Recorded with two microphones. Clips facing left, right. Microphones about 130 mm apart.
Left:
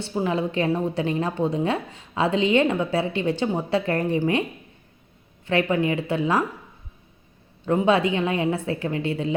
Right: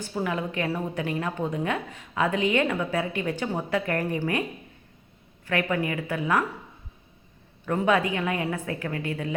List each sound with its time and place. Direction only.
0.0 s a woman's voice: 25° left (ahead or behind)
5.5 s a woman's voice: 25° left (ahead or behind)
7.6 s a woman's voice: 25° left (ahead or behind)